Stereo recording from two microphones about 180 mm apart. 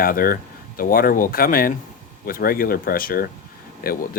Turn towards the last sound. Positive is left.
turn(degrees=55)  # may be behind; listen again after turning